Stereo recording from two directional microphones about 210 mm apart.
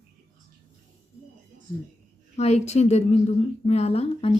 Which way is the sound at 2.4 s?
30° left (ahead or behind).